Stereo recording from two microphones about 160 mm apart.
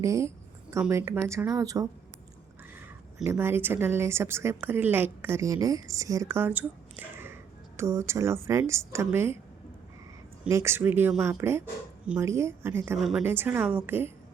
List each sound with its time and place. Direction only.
0.0 s speech: 20° right (ahead or behind)
2.7 s speech: 10° right (ahead or behind)
10.5 s speech: 15° right (ahead or behind)
13.0 s a woman's voice: centre (ahead or behind)
13.2 s speech: 15° right (ahead or behind)